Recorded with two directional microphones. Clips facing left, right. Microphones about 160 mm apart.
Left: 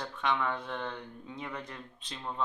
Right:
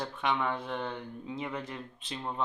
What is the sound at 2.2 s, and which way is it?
Speech, 15° right (ahead or behind).